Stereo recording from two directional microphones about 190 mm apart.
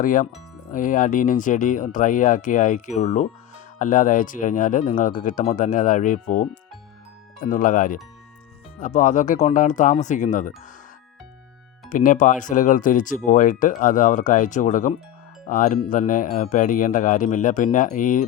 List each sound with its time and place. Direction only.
0.0 s speech: 45° left (ahead or behind)
11.9 s speech: 45° left (ahead or behind)